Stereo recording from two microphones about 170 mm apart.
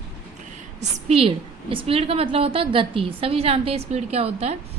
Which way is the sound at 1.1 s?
35° right (ahead or behind).